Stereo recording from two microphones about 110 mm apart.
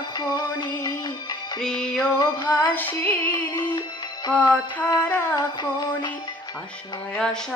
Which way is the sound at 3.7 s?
40° left (ahead or behind).